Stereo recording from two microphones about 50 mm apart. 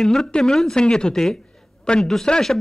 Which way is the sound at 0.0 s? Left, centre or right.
Centre.